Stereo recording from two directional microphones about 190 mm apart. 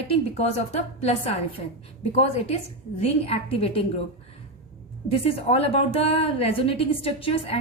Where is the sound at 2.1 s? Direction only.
35° left (ahead or behind).